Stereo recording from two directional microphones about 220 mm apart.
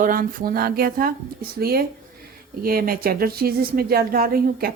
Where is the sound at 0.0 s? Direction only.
40° right (ahead or behind).